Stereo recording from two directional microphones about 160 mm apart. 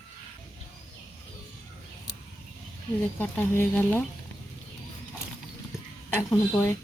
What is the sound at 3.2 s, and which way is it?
Speech, 10° left (ahead or behind).